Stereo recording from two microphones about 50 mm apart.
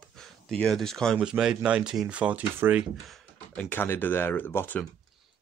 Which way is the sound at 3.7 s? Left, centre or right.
Left.